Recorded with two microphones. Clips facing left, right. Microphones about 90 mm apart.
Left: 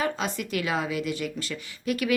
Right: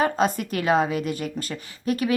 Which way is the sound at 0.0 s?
45° right (ahead or behind).